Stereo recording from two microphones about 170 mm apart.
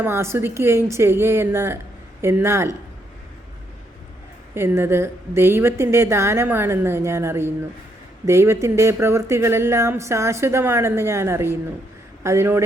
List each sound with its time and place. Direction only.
0.0 s speech: 15° right (ahead or behind)
4.5 s speech: 15° right (ahead or behind)